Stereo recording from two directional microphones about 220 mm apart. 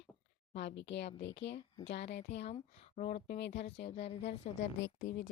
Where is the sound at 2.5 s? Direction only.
35° left (ahead or behind); by 3.7 s 50° left (ahead or behind).